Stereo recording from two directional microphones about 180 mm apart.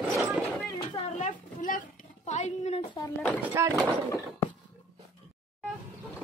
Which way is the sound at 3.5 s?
15° right (ahead or behind).